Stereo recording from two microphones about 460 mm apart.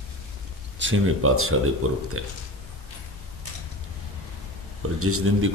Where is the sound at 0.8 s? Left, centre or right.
Right.